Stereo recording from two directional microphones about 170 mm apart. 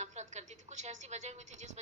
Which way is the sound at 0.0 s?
45° right (ahead or behind).